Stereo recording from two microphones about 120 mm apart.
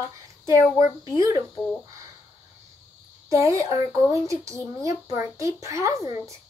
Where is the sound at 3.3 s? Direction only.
25° right (ahead or behind).